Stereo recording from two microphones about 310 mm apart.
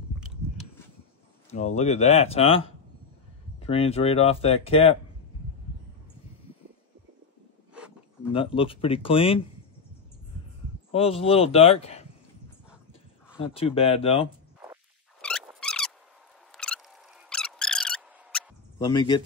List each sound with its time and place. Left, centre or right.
1.5 s speech: left
7.7 s a sound: centre
8.3 s speech: centre
10.9 s speech: centre
13.5 s speech: centre
15.2 s a sound: centre
18.9 s speech: centre